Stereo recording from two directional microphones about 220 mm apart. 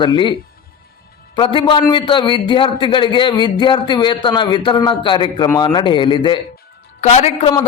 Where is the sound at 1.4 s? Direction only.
25° left (ahead or behind).